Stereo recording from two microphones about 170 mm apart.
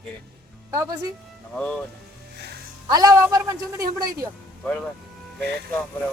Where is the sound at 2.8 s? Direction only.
20° right (ahead or behind).